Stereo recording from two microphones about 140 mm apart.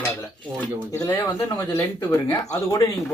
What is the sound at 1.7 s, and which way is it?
Speech, 20° left (ahead or behind).